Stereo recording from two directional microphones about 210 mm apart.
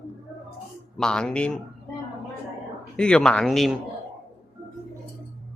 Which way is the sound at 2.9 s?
5° left (ahead or behind).